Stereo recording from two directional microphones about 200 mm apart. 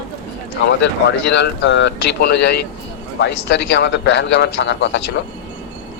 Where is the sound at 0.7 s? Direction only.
60° left (ahead or behind).